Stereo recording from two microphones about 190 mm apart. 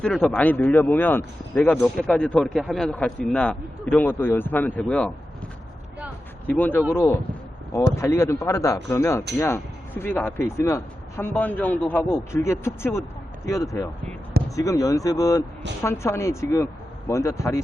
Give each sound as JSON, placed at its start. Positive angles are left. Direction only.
{"t": 0.0, "sound": "speech", "side_deg": 5}
{"t": 6.5, "sound": "speech", "side_deg": 10}